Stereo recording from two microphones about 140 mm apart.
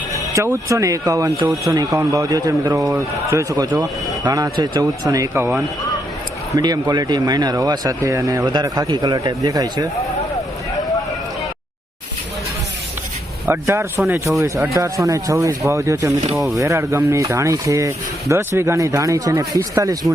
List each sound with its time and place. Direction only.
0.3 s speech: 20° right (ahead or behind)
6.6 s speech: 30° right (ahead or behind)
13.4 s a man's voice: 15° right (ahead or behind)